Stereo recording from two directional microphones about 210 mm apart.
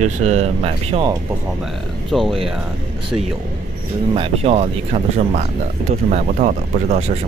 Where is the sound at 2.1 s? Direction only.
Centre (ahead or behind).